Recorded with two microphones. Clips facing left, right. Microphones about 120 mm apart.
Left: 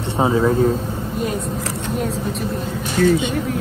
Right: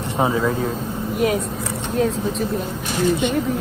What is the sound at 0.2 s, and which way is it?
Speech, 25° left (ahead or behind).